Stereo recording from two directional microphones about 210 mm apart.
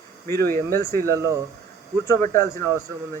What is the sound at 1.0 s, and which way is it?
Speech, 15° right (ahead or behind).